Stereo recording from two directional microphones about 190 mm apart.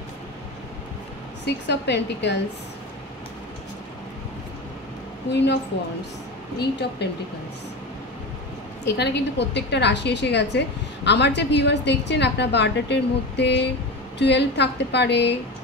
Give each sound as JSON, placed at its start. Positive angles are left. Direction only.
{"t": 1.4, "sound": "a woman's voice", "side_deg": 65}
{"t": 5.3, "sound": "a woman's voice", "side_deg": 65}
{"t": 7.0, "sound": "a woman's voice", "side_deg": 60}
{"t": 8.8, "sound": "a woman's voice", "side_deg": 60}